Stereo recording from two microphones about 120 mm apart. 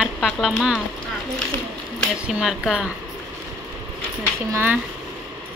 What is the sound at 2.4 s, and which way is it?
Speech, 5° right (ahead or behind).